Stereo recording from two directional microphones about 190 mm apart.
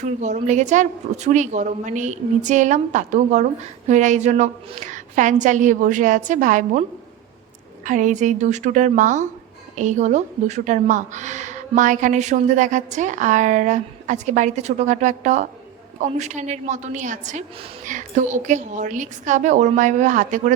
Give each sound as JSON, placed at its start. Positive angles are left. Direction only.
{"t": 0.0, "sound": "a woman's voice", "side_deg": -40}
{"t": 7.9, "sound": "a woman's voice", "side_deg": -40}